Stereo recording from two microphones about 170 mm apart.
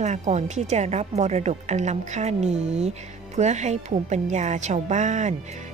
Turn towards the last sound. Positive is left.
turn(degrees=-45)  # may be behind; listen again after turning